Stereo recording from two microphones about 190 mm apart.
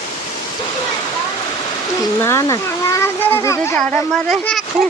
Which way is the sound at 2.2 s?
15° left (ahead or behind).